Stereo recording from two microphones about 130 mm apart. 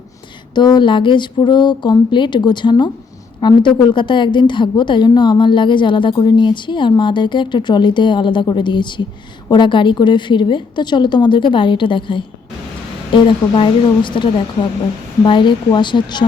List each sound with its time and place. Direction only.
0.5 s a woman's voice: 35° left (ahead or behind)